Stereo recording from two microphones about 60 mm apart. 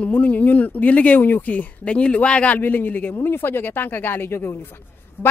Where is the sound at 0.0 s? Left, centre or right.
Left.